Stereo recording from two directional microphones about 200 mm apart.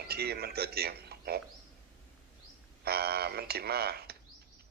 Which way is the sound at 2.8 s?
50° right (ahead or behind).